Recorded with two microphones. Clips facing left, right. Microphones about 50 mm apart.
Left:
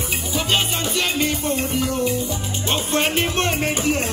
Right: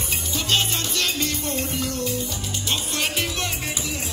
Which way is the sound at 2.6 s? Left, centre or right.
Left.